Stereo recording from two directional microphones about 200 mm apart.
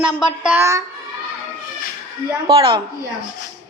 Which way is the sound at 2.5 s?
25° right (ahead or behind).